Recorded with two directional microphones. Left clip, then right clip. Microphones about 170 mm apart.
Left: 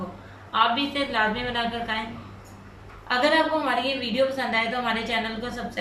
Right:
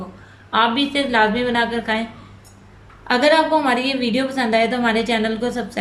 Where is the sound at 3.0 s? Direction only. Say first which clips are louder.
Right 6 dB; 70° right (ahead or behind).